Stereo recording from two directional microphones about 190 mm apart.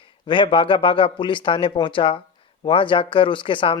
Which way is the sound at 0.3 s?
25° left (ahead or behind).